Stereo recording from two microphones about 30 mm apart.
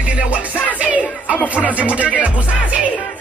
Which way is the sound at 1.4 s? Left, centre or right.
Left.